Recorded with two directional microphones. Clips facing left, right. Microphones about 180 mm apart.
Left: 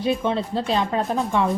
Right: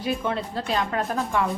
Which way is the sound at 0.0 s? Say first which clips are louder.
Left 4 dB; 25° left (ahead or behind).